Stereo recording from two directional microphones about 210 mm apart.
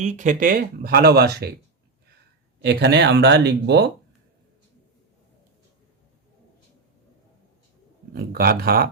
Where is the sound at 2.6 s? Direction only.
50° right (ahead or behind).